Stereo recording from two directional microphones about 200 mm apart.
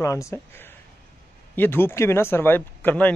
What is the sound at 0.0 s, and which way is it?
Speech, 15° left (ahead or behind).